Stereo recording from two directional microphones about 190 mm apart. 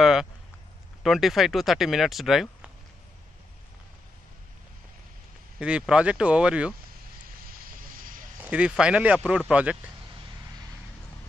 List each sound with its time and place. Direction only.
0.0 s a sound: centre (ahead or behind)
1.0 s speech: centre (ahead or behind)
5.6 s speech: 5° right (ahead or behind)
7.9 s vehicle: 45° right (ahead or behind)
8.4 s speech: 5° right (ahead or behind)